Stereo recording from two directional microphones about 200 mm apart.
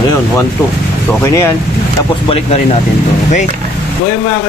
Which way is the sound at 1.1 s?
15° left (ahead or behind).